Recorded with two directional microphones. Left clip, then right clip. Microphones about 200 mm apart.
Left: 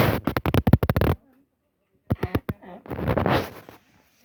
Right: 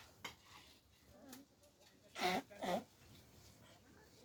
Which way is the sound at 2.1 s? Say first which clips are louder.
Left 10 dB; 25° right (ahead or behind).